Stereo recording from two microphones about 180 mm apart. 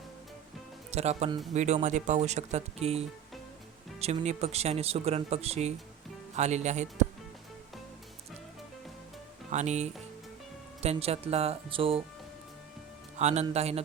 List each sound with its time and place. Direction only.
0.9 s speech: 35° right (ahead or behind)
9.5 s speech: 40° right (ahead or behind)
13.1 s speech: 35° right (ahead or behind)